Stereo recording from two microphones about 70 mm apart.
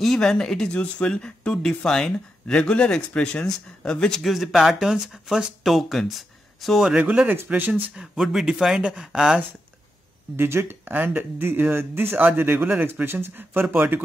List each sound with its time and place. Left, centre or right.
0.0 s speech: centre
4.2 s speech: centre
7.0 s speech: right
7.9 s speech: centre
10.3 s speech: right